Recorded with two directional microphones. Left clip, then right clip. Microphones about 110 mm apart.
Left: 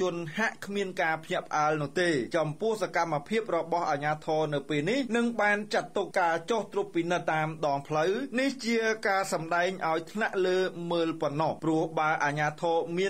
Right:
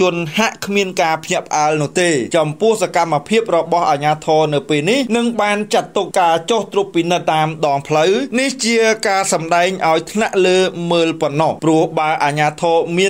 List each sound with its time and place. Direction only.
0.0 s speech: 25° right (ahead or behind)
2.4 s speech: 20° right (ahead or behind)